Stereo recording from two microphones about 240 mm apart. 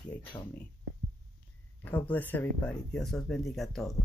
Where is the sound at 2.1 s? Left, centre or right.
Centre.